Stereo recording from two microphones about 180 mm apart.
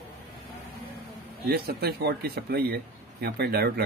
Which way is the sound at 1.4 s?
60° right (ahead or behind).